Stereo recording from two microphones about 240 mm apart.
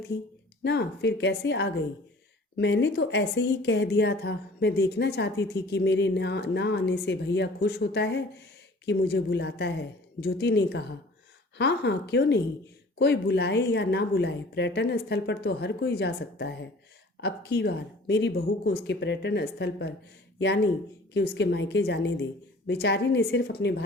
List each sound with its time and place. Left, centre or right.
0.6 s a woman's voice: left